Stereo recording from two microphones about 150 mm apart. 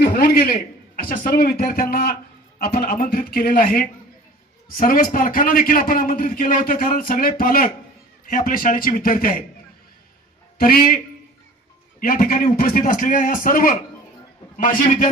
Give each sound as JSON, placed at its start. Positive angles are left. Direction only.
{"t": 0.0, "sound": "a man's voice", "side_deg": 90}
{"t": 2.6, "sound": "a man's voice", "side_deg": 90}
{"t": 10.6, "sound": "a man's voice", "side_deg": 85}
{"t": 11.9, "sound": "a man's voice", "side_deg": 70}